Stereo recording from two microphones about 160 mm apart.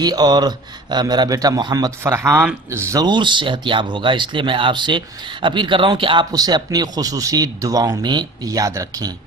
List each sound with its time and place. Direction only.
0.0 s speech: 25° right (ahead or behind)